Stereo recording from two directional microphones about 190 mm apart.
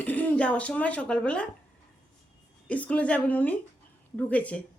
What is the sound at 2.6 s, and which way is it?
A woman's voice, 5° left (ahead or behind).